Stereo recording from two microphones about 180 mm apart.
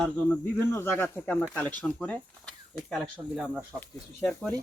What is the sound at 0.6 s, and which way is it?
Speech, 15° left (ahead or behind).